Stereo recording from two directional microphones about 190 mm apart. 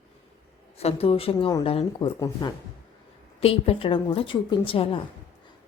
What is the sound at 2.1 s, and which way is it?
Speech, 15° left (ahead or behind).